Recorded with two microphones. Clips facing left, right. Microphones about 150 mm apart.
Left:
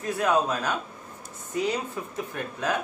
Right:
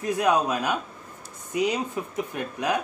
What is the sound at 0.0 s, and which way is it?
Speech, 15° right (ahead or behind).